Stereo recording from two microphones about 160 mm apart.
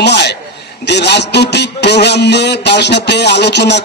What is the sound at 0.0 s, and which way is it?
A man's voice, 90° left.